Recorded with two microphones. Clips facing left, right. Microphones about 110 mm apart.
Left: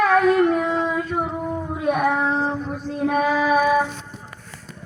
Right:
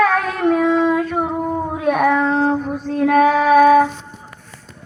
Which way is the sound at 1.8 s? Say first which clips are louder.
Right 4 dB; 90° right.